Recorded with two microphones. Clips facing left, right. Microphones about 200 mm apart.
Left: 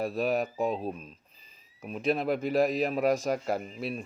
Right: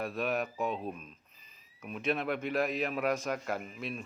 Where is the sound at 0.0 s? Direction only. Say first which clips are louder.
Left 5 dB; 35° left (ahead or behind).